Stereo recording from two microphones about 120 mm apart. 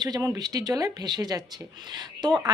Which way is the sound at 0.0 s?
30° right (ahead or behind).